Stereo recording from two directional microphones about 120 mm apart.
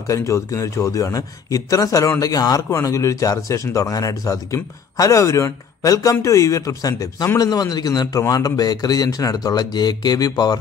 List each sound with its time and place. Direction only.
0.0 s a man's voice: 25° left (ahead or behind)